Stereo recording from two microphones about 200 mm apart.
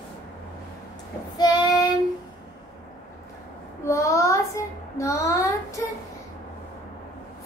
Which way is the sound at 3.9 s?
15° left (ahead or behind).